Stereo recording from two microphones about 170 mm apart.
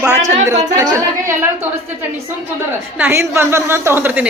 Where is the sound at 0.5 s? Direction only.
45° right (ahead or behind).